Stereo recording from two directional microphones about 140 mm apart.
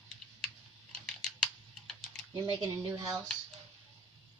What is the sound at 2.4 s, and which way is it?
Speech, 25° right (ahead or behind).